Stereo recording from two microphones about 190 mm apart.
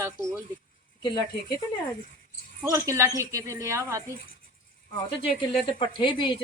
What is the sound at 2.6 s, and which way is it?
Speech, 15° right (ahead or behind).